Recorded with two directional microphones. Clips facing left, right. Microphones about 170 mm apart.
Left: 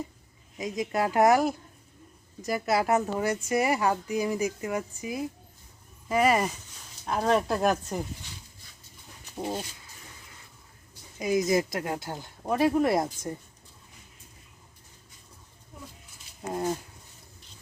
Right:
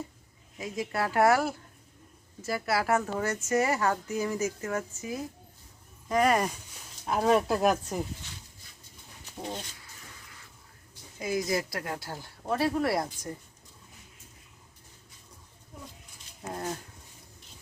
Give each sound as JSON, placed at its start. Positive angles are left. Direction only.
{"t": 0.6, "sound": "speech", "side_deg": 20}
{"t": 11.2, "sound": "speech", "side_deg": 20}
{"t": 16.5, "sound": "speech", "side_deg": 15}